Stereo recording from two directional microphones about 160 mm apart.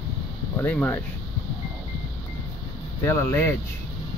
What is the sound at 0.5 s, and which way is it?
Speech, 10° left (ahead or behind).